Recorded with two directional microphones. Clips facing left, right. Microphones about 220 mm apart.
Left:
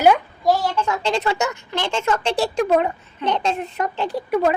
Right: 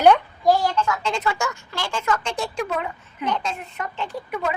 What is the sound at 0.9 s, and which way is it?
Speech, 35° left (ahead or behind).